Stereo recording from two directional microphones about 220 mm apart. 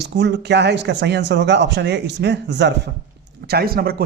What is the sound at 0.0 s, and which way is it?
Speech, 50° right (ahead or behind).